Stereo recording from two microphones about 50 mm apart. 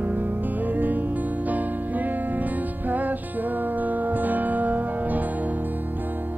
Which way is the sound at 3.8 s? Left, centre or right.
Right.